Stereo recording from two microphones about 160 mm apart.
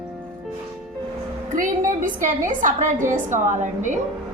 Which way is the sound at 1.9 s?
55° right (ahead or behind).